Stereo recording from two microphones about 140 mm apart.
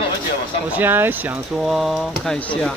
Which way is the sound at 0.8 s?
15° right (ahead or behind).